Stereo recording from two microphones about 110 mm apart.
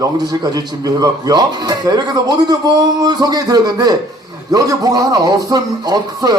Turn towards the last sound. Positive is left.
turn(degrees=-35)  # may be behind; listen again after turning